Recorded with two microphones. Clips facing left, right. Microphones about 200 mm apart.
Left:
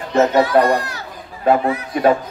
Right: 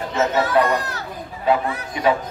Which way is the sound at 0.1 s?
55° left (ahead or behind).